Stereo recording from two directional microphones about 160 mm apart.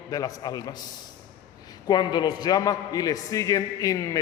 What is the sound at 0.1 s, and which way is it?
Speech, 20° left (ahead or behind).